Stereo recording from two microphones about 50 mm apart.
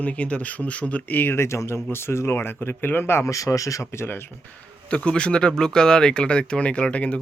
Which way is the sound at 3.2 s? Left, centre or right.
Left.